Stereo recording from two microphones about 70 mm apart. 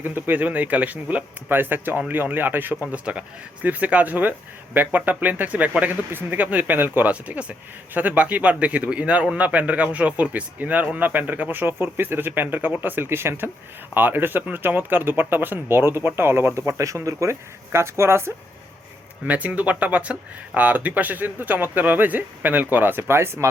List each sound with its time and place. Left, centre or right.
0.0 s speech: right
1.5 s speech: right
19.2 s speech: right